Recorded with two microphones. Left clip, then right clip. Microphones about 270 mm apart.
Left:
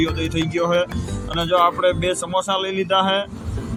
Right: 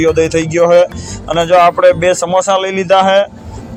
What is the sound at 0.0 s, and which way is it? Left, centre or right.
Speech, centre.